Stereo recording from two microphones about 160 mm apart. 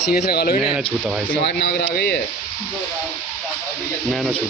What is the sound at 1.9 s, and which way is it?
Speech, 75° left (ahead or behind).